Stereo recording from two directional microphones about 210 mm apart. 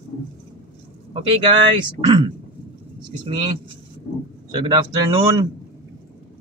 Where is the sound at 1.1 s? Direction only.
25° right (ahead or behind).